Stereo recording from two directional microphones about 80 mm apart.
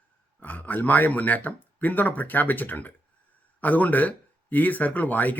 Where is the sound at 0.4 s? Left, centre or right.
Left.